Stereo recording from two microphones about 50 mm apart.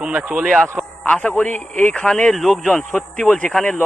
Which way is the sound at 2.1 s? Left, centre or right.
Centre.